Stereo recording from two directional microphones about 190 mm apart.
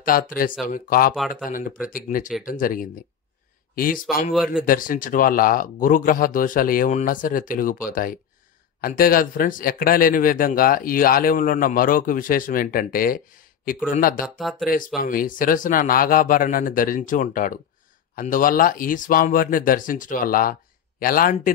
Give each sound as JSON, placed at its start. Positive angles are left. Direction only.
{"t": 0.0, "sound": "speech", "side_deg": 50}
{"t": 4.3, "sound": "speech", "side_deg": 0}
{"t": 4.6, "sound": "speech", "side_deg": 45}
{"t": 14.2, "sound": "speech", "side_deg": 0}
{"t": 15.0, "sound": "speech", "side_deg": 45}